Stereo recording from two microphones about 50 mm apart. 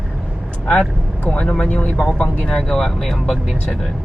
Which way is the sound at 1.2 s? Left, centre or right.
Left.